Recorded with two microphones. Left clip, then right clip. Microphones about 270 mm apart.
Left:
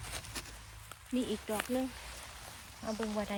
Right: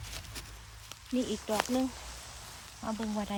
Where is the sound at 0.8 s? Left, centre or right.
Centre.